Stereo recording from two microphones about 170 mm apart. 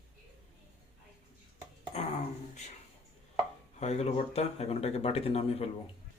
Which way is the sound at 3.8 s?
40° left (ahead or behind).